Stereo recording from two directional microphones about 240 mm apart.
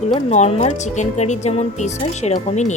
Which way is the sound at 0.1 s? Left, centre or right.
Left.